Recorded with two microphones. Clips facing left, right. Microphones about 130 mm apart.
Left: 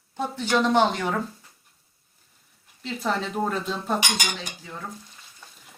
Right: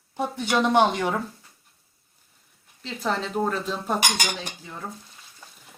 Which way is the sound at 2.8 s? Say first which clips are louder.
Even; centre (ahead or behind).